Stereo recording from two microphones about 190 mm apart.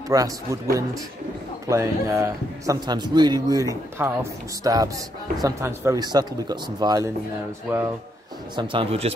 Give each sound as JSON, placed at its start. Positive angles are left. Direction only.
{"t": 0.1, "sound": "a man's voice", "side_deg": -20}
{"t": 8.5, "sound": "speech", "side_deg": -30}